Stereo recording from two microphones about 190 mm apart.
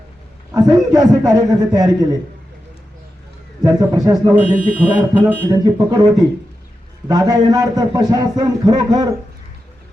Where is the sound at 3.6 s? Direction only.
20° right (ahead or behind).